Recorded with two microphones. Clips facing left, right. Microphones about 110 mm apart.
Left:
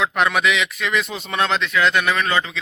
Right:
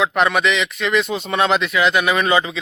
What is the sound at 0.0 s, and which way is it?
A man's voice, centre (ahead or behind).